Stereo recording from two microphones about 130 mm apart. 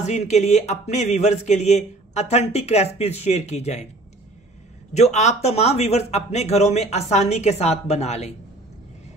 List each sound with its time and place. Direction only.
0.0 s speech: 60° left (ahead or behind)
4.9 s speech: 60° left (ahead or behind)